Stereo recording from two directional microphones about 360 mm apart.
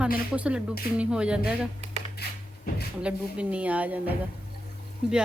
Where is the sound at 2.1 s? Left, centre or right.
Left.